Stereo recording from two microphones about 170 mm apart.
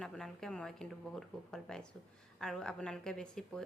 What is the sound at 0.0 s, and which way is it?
A woman's voice, 5° left (ahead or behind).